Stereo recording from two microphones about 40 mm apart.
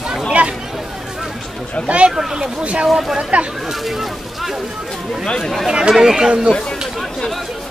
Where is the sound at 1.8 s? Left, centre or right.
Right.